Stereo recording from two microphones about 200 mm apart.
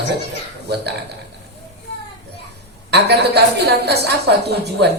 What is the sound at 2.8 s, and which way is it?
A woman's voice, 55° right (ahead or behind).